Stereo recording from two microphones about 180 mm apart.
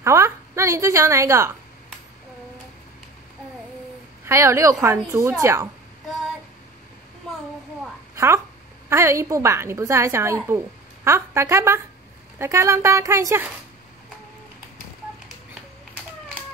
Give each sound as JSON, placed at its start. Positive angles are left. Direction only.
{"t": 0.0, "sound": "a woman's voice", "side_deg": -15}
{"t": 4.2, "sound": "a woman's voice", "side_deg": -15}
{"t": 8.1, "sound": "a sound", "side_deg": -15}
{"t": 8.8, "sound": "a woman's voice", "side_deg": -15}